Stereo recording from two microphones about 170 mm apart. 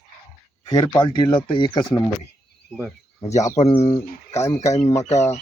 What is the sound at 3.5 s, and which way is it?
Speech, 45° left (ahead or behind).